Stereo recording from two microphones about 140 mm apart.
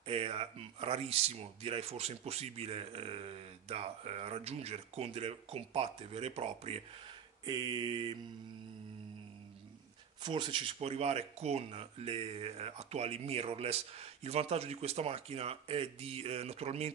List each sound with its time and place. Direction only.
0.0 s speech: 45° right (ahead or behind)
7.4 s mantra: 30° right (ahead or behind)
10.2 s mantra: 35° right (ahead or behind)
10.8 s speech: 45° right (ahead or behind)